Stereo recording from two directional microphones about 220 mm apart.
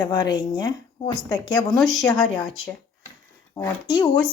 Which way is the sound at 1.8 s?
Centre (ahead or behind).